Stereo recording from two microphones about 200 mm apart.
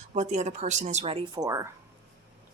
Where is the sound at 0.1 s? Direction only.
35° right (ahead or behind); by 1.7 s 15° right (ahead or behind).